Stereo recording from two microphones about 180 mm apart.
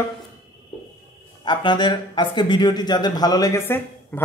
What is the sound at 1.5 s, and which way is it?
Speech, 25° left (ahead or behind).